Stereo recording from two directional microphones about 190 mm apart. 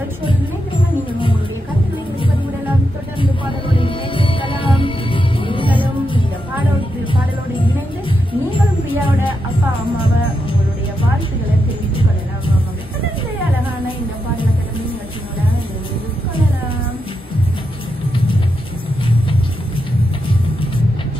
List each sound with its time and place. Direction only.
3.2 s music: 25° left (ahead or behind)